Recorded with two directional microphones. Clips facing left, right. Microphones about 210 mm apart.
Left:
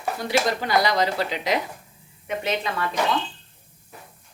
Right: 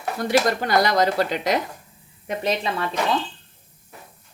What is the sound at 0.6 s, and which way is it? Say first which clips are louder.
Speech: right 2 dB; 45° right (ahead or behind).